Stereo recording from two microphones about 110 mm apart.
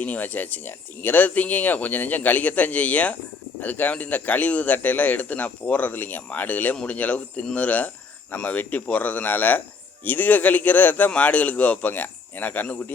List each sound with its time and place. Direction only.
0.0 s a man's voice: 15° left (ahead or behind)